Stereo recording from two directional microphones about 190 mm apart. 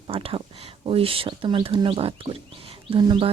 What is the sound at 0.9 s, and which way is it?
Speech, 30° right (ahead or behind).